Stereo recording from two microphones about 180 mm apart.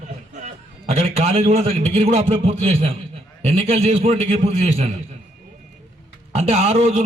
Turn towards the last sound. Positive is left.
turn(degrees=-35)  # may be behind; listen again after turning